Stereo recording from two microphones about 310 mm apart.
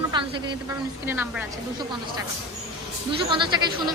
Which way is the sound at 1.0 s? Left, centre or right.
Centre.